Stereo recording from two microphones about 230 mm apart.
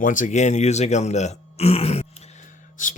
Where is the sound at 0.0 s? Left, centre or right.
Left.